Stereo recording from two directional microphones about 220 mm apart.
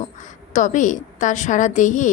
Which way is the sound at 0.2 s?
35° left (ahead or behind).